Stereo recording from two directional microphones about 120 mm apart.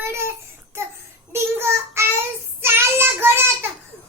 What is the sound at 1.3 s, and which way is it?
Child singing, 20° right (ahead or behind).